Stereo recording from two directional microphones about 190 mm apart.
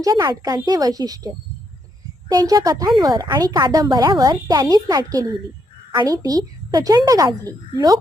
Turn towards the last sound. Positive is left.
turn(degrees=-20)  # may be behind; listen again after turning